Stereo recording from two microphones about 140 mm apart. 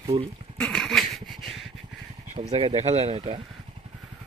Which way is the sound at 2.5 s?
45° right (ahead or behind).